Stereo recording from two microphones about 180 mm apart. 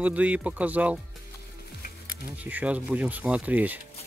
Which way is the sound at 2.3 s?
10° right (ahead or behind).